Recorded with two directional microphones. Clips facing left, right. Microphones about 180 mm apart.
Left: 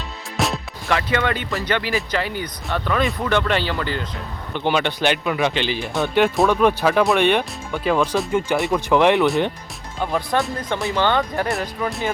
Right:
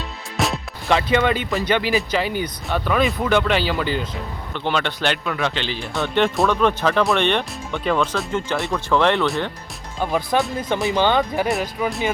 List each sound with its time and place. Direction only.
0.3 s music: centre (ahead or behind)
0.9 s speech: 20° right (ahead or behind)
4.5 s a man's voice: 5° left (ahead or behind)
10.0 s speech: 5° right (ahead or behind)
10.8 s speech: 15° right (ahead or behind)
11.4 s speech: centre (ahead or behind)